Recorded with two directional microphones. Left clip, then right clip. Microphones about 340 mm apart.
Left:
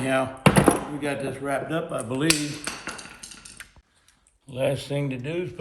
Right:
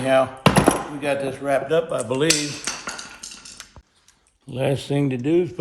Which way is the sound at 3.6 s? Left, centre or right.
Right.